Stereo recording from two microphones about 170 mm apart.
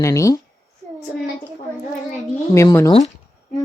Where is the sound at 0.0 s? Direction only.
20° left (ahead or behind).